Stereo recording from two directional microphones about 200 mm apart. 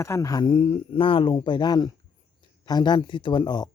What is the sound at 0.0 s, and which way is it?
Speech, 15° left (ahead or behind).